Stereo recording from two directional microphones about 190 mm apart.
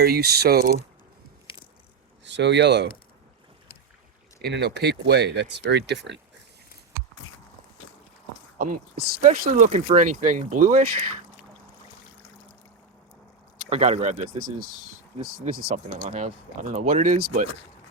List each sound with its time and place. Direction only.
0.0 s speech: 55° right (ahead or behind)
2.2 s speech: 65° right (ahead or behind)
4.4 s speech: 60° right (ahead or behind)
8.5 s speech: 45° right (ahead or behind)
13.7 s speech: 35° right (ahead or behind)